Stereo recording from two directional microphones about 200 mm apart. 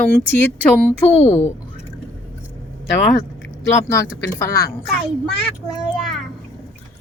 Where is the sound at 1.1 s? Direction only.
30° left (ahead or behind).